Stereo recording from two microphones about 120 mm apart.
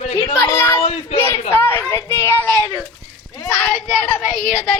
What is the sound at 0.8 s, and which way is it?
Speech, 65° left (ahead or behind).